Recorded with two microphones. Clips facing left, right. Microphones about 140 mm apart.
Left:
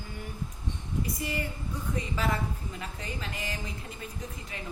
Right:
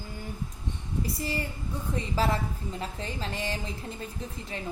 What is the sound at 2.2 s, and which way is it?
A woman's voice, 35° right (ahead or behind).